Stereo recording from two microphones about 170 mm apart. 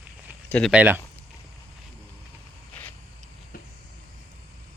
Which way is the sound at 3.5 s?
55° left (ahead or behind).